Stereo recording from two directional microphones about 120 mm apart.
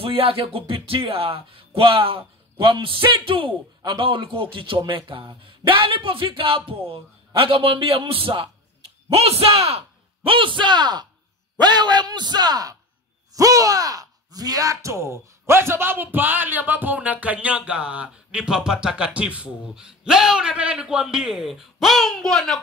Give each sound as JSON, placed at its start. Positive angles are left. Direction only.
{"t": 0.0, "sound": "a man's voice", "side_deg": -50}